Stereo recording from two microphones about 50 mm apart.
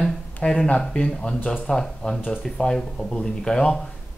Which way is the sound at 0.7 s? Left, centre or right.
Centre.